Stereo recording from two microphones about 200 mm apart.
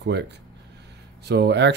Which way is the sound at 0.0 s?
60° right (ahead or behind).